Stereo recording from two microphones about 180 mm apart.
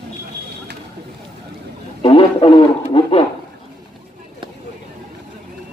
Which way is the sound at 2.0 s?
25° left (ahead or behind).